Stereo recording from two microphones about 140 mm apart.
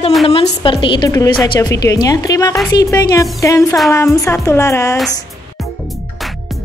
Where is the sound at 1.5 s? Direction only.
25° left (ahead or behind).